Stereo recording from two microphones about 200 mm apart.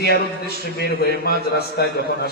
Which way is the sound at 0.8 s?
50° left (ahead or behind).